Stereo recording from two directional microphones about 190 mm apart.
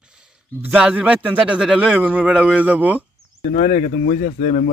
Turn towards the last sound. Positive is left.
turn(degrees=45)  # may be behind; listen again after turning